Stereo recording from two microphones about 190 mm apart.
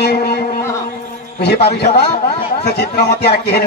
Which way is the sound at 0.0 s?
55° left (ahead or behind).